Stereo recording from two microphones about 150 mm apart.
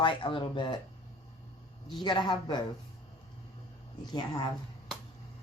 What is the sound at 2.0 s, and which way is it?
Speech, 30° left (ahead or behind).